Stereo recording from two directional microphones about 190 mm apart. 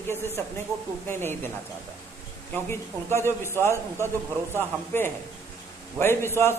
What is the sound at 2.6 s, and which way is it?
Speech, 10° left (ahead or behind).